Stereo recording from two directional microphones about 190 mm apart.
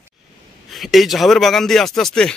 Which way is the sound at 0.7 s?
Centre (ahead or behind).